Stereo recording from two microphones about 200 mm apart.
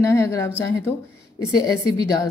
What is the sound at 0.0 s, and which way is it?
Speech, 15° left (ahead or behind).